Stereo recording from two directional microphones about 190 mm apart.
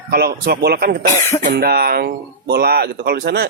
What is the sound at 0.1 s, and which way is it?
A man's voice, 55° right (ahead or behind).